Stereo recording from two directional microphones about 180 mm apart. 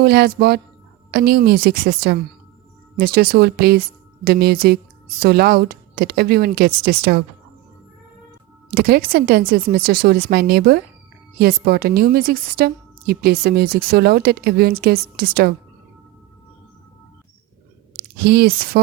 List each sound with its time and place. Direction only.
0.0 s a woman's voice: 60° right (ahead or behind)
8.7 s a woman's voice: 55° right (ahead or behind)
18.2 s a woman's voice: 60° right (ahead or behind)